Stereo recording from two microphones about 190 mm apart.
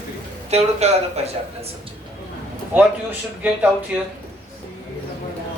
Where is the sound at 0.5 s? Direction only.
35° right (ahead or behind).